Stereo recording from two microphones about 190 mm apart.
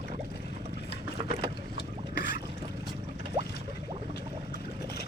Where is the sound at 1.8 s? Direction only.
55° left (ahead or behind).